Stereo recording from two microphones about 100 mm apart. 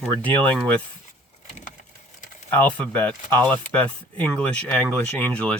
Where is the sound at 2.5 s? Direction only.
15° left (ahead or behind).